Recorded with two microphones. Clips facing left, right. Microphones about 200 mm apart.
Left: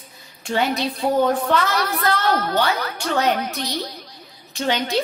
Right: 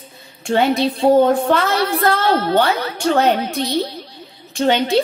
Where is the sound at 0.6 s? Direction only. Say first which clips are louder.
Right 6 dB; 30° right (ahead or behind).